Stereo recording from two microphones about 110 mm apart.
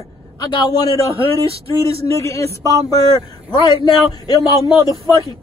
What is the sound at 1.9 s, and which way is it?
Speech, 65° right (ahead or behind).